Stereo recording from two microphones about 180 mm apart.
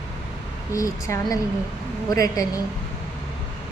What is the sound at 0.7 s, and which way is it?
A woman's voice, 15° left (ahead or behind).